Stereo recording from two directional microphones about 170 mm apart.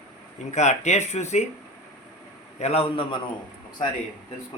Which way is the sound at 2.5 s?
40° left (ahead or behind).